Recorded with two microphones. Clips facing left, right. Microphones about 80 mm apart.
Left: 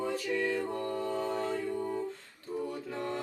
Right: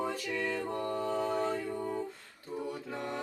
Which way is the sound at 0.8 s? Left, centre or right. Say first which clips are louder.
Right 1 dB; centre.